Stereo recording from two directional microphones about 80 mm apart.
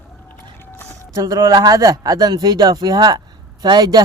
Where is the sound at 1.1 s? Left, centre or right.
Right.